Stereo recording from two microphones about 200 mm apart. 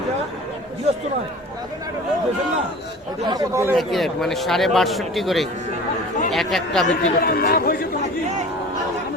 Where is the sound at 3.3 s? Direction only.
15° right (ahead or behind).